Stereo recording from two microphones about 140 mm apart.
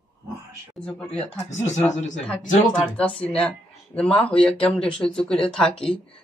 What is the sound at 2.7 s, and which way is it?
Speech, 10° left (ahead or behind).